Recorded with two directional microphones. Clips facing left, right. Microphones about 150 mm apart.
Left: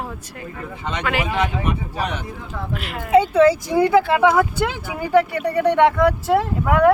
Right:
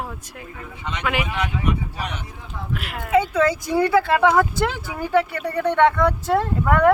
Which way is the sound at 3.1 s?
30° left (ahead or behind).